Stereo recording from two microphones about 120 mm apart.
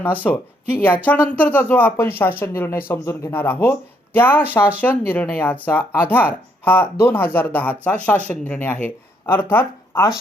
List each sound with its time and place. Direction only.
0.0 s speech: 15° left (ahead or behind)